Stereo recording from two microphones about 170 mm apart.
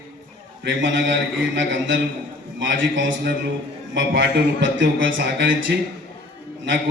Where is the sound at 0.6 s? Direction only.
90° right.